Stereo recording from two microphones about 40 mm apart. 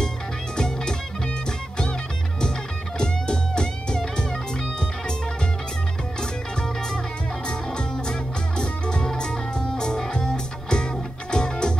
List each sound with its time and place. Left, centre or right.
0.6 s music: centre
3.0 s music: left
7.4 s music: left